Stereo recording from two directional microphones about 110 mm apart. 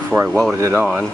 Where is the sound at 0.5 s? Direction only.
25° right (ahead or behind).